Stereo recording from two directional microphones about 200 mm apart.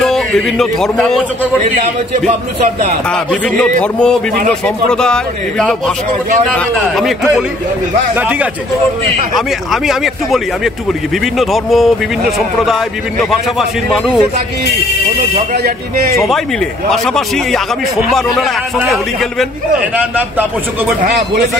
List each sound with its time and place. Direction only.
0.0 s a man's voice: centre (ahead or behind)
1.6 s a man's voice: 35° right (ahead or behind)
3.8 s a man's voice: 5° left (ahead or behind)
9.7 s a man's voice: centre (ahead or behind)
13.2 s a man's voice: centre (ahead or behind)
15.5 s speech: 50° right (ahead or behind)
16.9 s a man's voice: centre (ahead or behind)